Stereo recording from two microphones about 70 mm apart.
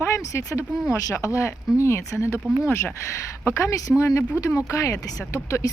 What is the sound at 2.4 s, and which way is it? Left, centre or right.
Speech, right.